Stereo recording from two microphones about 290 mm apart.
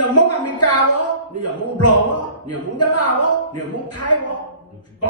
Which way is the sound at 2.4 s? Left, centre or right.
Left.